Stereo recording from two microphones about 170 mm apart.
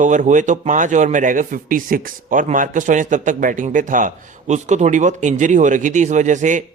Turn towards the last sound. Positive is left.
turn(degrees=-45)  # may be behind; listen again after turning